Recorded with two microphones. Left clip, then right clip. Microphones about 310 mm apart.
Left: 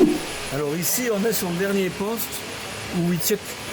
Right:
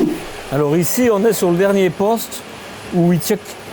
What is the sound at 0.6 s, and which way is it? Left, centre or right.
Speech, right.